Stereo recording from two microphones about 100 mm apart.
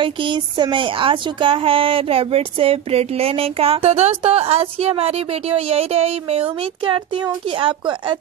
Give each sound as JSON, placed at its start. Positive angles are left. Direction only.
{"t": 0.0, "sound": "speech", "side_deg": -55}